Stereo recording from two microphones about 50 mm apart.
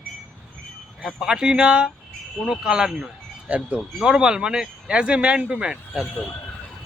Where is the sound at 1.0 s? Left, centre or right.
Centre.